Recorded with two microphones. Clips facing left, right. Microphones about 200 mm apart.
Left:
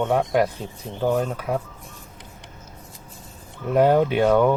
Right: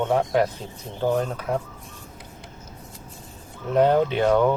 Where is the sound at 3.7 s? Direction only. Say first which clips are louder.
Left 1 dB; 10° left (ahead or behind).